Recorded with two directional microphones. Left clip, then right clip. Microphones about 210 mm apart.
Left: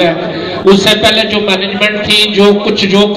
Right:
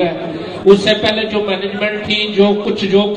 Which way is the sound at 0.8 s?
50° left (ahead or behind).